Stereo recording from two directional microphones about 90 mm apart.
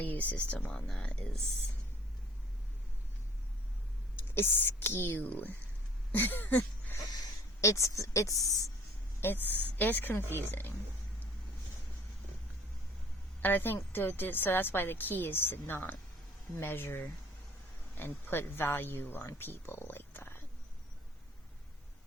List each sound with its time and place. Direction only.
0.0 s speech: 20° left (ahead or behind)
4.4 s a woman's voice: 25° left (ahead or behind)
6.1 s a sound: 20° left (ahead or behind)
7.1 s speech: 40° left (ahead or behind)
9.2 s a woman's voice: 20° left (ahead or behind)
13.4 s a woman's voice: 20° left (ahead or behind)